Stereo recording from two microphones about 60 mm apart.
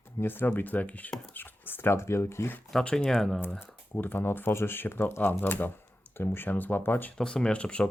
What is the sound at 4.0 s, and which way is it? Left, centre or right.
Speech, left.